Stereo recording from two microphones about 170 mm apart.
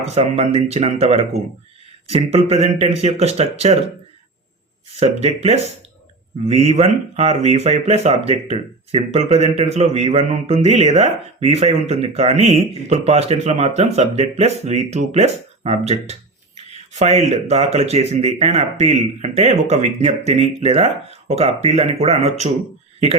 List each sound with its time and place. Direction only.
0.1 s speech: 35° right (ahead or behind)
4.9 s speech: 40° right (ahead or behind)
16.7 s a sound: 40° right (ahead or behind)
17.5 s speech: 40° right (ahead or behind)